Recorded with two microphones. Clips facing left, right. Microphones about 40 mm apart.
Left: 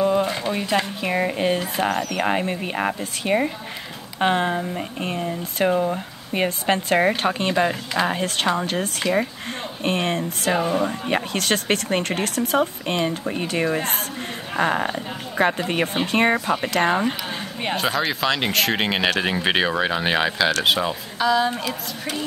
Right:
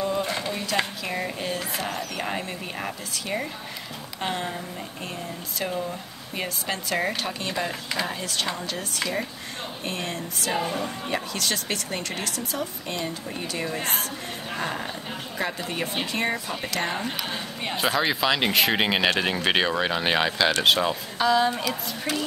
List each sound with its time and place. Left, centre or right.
0.0 s a sound: left
1.0 s speech: left
17.7 s speech: centre